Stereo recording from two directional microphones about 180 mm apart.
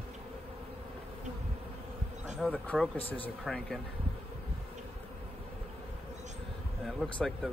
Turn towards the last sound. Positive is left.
turn(degrees=0)  # may be behind; listen again after turning